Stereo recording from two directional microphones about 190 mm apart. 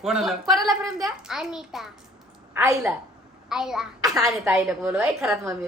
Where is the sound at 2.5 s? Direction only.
15° right (ahead or behind).